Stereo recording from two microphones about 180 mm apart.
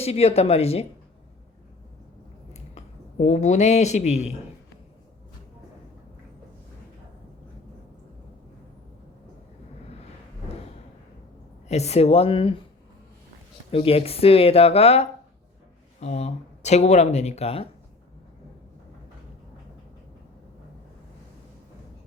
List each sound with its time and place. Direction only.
0.0 s speech: 35° left (ahead or behind)
2.5 s speech: 40° left (ahead or behind)
11.7 s speech: 35° left (ahead or behind)
13.7 s speech: 30° left (ahead or behind)